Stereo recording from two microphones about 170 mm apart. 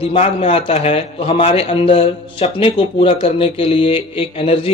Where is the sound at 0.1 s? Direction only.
35° left (ahead or behind).